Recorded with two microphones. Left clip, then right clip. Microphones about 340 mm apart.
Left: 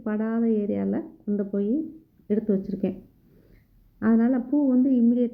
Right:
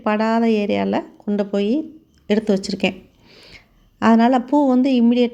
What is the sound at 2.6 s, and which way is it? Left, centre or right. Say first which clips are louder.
Speech: right 8 dB; centre.